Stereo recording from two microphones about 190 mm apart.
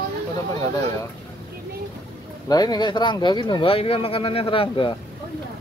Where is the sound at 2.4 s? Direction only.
20° left (ahead or behind).